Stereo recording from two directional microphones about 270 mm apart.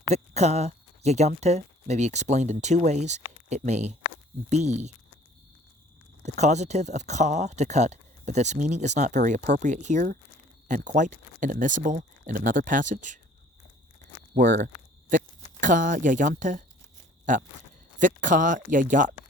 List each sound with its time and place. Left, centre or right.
0.1 s speech: right
6.2 s speech: right
14.3 s speech: right